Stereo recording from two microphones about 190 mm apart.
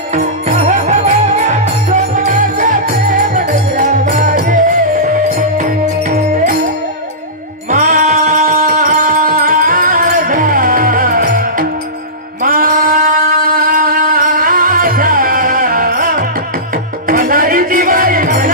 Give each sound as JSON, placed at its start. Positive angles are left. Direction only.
{"t": 0.1, "sound": "music", "side_deg": -40}
{"t": 2.1, "sound": "music", "side_deg": -45}
{"t": 7.7, "sound": "music", "side_deg": -40}